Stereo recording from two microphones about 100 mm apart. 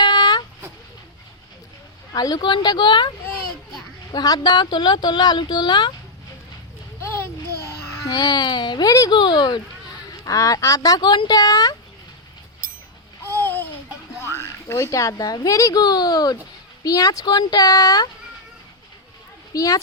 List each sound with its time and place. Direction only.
0.0 s a sound: 45° left (ahead or behind)
2.1 s speech: 40° left (ahead or behind)
4.1 s speech: 40° left (ahead or behind)
8.1 s speech: 45° left (ahead or behind)
9.1 s speech: 50° left (ahead or behind)
10.2 s speech: 35° left (ahead or behind)
13.2 s babbling: 20° left (ahead or behind)
14.2 s a child's voice: 25° left (ahead or behind)
19.5 s speech: 35° left (ahead or behind)